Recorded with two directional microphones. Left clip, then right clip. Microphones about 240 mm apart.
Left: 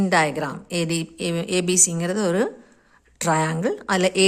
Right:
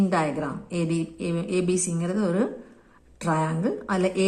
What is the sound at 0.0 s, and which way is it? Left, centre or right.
A woman's voice, left.